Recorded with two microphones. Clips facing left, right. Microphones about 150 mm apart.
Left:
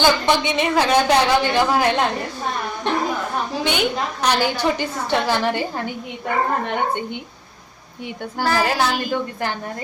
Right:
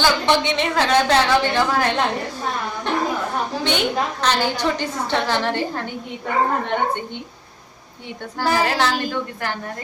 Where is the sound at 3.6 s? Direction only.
5° left (ahead or behind).